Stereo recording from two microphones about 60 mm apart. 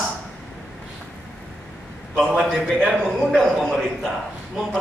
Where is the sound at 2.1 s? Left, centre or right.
Centre.